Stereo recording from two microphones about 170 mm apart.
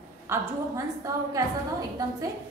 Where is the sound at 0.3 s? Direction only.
20° right (ahead or behind).